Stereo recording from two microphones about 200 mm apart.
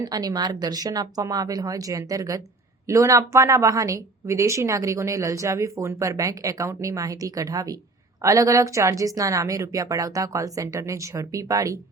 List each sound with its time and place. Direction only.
0.0 s a woman's voice: 20° right (ahead or behind)